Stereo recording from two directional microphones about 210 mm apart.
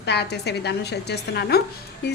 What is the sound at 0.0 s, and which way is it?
A woman's voice, 55° left (ahead or behind).